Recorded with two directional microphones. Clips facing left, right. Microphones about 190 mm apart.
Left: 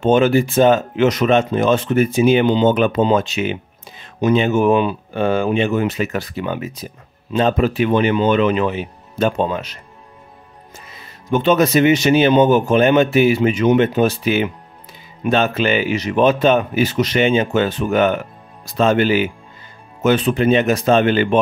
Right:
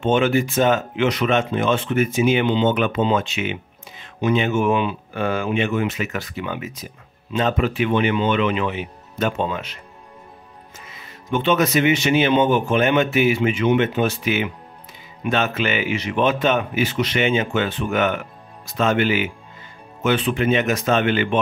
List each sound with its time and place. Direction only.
0.0 s speech: 40° left (ahead or behind)
10.9 s speech: 35° left (ahead or behind)